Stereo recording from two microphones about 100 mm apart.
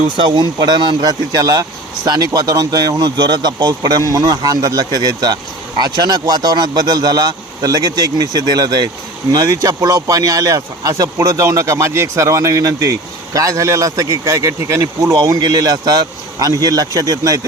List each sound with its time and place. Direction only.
0.2 s speech: 50° right (ahead or behind)